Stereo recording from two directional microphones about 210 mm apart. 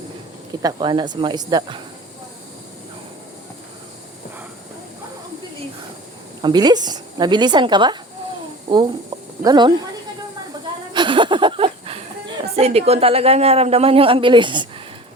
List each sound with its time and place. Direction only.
0.6 s speech: 20° right (ahead or behind)
6.4 s speech: 20° right (ahead or behind)
9.4 s speech: 20° right (ahead or behind)
10.9 s a sound: 25° right (ahead or behind)
12.5 s speech: 30° right (ahead or behind)